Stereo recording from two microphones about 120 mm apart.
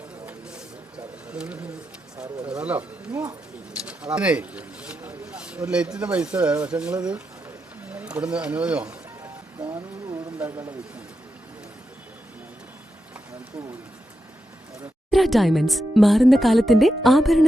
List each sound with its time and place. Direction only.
0.3 s a sound: 5° right (ahead or behind)
2.5 s speech: 10° right (ahead or behind)
9.6 s music: 40° right (ahead or behind)
15.1 s speech: centre (ahead or behind)